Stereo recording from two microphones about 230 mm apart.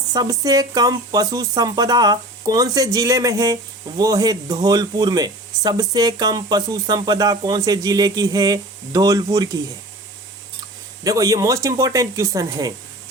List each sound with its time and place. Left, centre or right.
0.1 s speech: centre
11.0 s speech: centre